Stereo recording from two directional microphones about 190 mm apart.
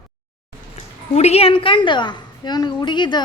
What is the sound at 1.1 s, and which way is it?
Speech, 35° left (ahead or behind).